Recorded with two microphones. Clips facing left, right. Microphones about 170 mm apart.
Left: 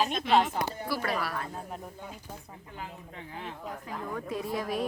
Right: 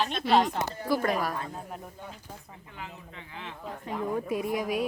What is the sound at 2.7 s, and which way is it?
Speech, 40° left (ahead or behind).